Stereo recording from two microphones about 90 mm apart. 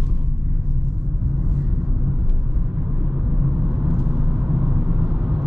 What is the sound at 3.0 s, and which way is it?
Vehicle, 15° right (ahead or behind).